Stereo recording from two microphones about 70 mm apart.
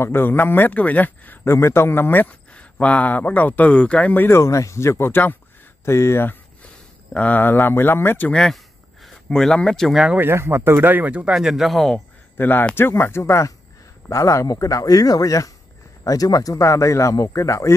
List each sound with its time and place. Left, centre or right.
0.0 s a man's voice: left
1.4 s speech: left
2.5 s a man's voice: centre
4.4 s speech: left
5.9 s speech: left
7.2 s speech: left
8.3 s speech: centre
10.1 s a man's voice: right
11.3 s speech: centre
12.4 s a man's voice: left